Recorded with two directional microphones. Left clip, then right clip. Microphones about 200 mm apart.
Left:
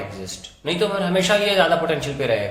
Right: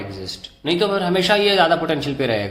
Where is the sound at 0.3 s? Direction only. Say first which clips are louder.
Right 5 dB; 35° right (ahead or behind).